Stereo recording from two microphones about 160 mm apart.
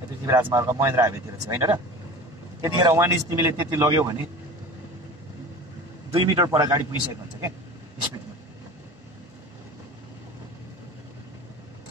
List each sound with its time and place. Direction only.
0.2 s a man's voice: 20° right (ahead or behind)
6.1 s a man's voice: 25° right (ahead or behind)